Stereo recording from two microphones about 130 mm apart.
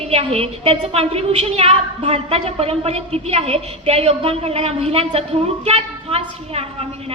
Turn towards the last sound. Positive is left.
turn(degrees=-50)  # may be behind; listen again after turning